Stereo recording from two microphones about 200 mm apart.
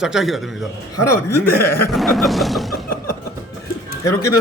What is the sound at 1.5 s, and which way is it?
Speech, 50° left (ahead or behind).